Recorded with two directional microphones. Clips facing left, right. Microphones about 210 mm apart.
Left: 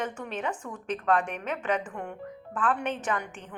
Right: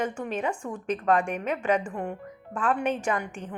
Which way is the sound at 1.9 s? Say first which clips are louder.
Right 5 dB; 35° right (ahead or behind).